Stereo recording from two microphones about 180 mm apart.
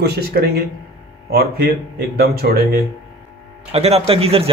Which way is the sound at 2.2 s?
60° right (ahead or behind).